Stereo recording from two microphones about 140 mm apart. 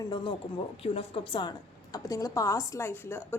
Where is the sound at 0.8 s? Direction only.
45° left (ahead or behind).